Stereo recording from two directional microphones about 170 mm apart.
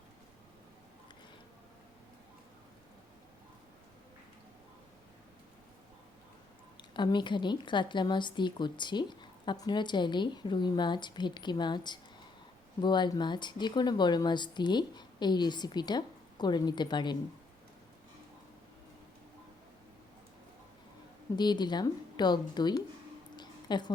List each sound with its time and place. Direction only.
6.9 s a woman's voice: 25° left (ahead or behind)
21.3 s a woman's voice: 25° left (ahead or behind)
23.4 s a sound: 25° left (ahead or behind)